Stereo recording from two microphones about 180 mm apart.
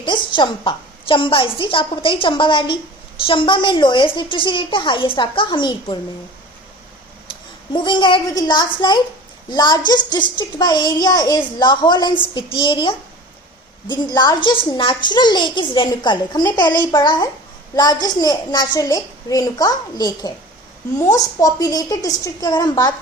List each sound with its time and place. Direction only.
0.0 s a child's voice: 25° left (ahead or behind)
7.7 s a child's voice: 25° left (ahead or behind)